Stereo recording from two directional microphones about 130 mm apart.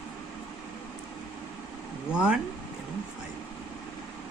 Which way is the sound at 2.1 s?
10° right (ahead or behind).